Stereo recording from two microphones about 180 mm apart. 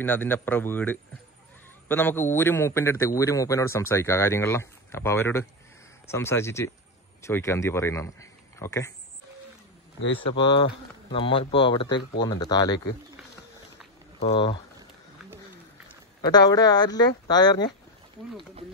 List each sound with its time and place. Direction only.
0.0 s a man's voice: 10° left (ahead or behind)
10.2 s speech: 25° left (ahead or behind)
14.2 s speech: 30° left (ahead or behind)
16.2 s speech: 20° left (ahead or behind)